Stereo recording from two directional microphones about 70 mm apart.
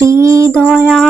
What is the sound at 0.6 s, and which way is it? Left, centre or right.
Music, centre.